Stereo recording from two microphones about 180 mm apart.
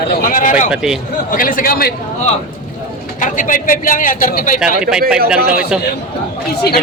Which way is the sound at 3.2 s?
45° left (ahead or behind).